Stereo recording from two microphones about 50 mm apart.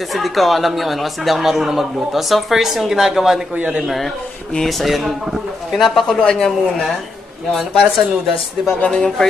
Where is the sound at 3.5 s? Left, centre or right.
Right.